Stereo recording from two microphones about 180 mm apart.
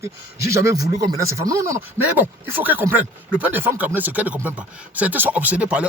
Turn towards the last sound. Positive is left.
turn(degrees=-5)  # may be behind; listen again after turning